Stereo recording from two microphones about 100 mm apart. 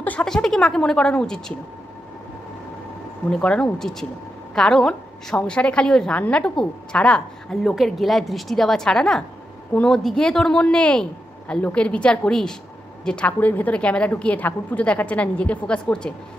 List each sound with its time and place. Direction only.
0.2 s a woman's voice: 5° left (ahead or behind)
3.3 s a woman's voice: 10° left (ahead or behind)